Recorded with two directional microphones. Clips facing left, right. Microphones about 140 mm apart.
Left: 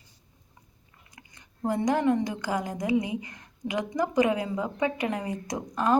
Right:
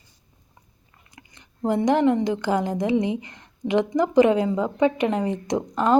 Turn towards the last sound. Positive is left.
turn(degrees=-25)  # may be behind; listen again after turning